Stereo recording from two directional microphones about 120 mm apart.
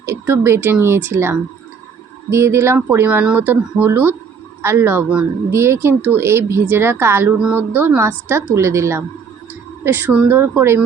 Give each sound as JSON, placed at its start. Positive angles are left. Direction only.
{"t": 0.0, "sound": "speech", "side_deg": -20}